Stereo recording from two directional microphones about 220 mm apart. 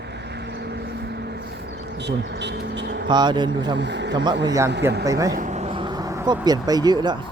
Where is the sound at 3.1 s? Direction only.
20° right (ahead or behind).